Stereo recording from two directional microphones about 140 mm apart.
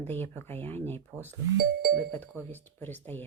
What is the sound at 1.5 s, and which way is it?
Speech, 90° right.